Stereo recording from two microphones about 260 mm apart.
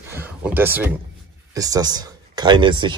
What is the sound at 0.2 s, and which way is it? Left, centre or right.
Speech, centre.